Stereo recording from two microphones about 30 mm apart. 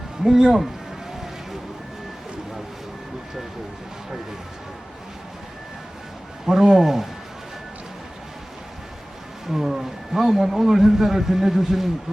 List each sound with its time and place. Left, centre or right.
0.3 s speech: right
6.4 s a man's voice: centre
9.5 s wild animals: centre
10.7 s a man's voice: centre